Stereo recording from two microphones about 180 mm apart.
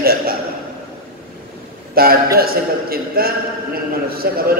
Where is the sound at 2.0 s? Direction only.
55° right (ahead or behind).